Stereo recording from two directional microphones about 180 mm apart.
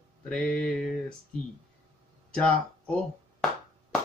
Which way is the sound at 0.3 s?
5° left (ahead or behind).